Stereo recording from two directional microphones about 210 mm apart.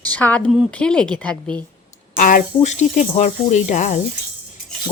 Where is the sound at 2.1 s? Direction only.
40° left (ahead or behind).